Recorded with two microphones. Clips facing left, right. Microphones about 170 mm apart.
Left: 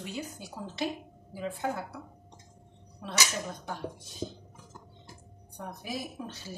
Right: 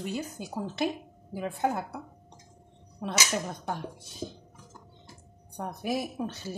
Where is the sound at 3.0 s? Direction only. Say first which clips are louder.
Right 5 dB; 45° right (ahead or behind).